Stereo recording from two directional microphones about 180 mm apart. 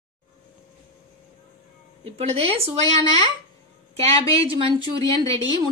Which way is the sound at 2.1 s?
35° right (ahead or behind).